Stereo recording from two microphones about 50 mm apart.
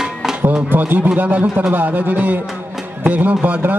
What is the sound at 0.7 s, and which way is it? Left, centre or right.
A man's voice, right.